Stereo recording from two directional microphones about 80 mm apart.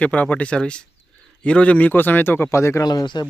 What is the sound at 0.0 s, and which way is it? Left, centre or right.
A man's voice, centre.